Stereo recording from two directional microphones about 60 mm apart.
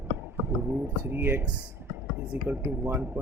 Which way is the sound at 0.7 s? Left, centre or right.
Right.